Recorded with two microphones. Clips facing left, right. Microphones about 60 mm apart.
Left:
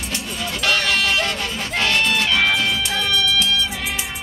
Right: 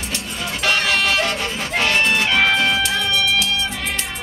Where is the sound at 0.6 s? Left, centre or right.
Centre.